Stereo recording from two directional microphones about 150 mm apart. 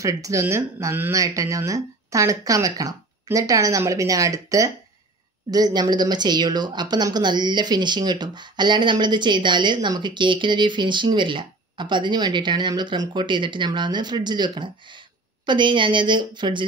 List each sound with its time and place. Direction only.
0.0 s a woman's voice: 20° right (ahead or behind)